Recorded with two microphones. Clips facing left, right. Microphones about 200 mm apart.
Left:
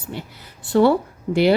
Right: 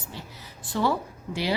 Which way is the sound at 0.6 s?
65° left (ahead or behind).